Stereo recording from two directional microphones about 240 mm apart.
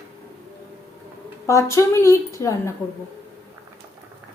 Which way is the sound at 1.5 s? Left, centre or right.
Centre.